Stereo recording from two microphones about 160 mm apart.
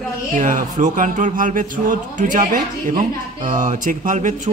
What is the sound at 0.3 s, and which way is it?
Speech, 55° right (ahead or behind).